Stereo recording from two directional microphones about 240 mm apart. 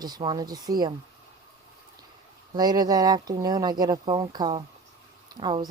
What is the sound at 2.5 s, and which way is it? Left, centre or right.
Speech, centre.